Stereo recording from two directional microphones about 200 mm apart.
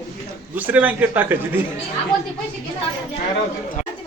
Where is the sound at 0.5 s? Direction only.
10° right (ahead or behind).